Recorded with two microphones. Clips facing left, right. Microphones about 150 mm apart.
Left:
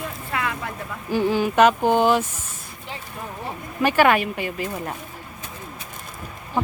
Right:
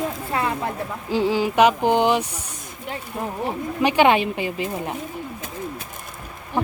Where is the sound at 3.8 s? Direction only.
20° right (ahead or behind).